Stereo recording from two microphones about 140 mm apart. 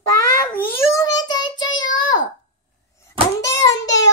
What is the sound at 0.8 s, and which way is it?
Child singing, 25° left (ahead or behind).